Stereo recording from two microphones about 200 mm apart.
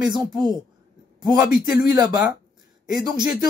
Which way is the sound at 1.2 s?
20° right (ahead or behind).